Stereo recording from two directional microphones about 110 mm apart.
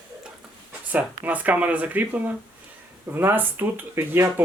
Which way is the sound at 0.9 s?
15° right (ahead or behind).